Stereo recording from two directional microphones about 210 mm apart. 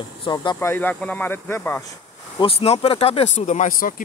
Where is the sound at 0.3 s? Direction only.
20° left (ahead or behind).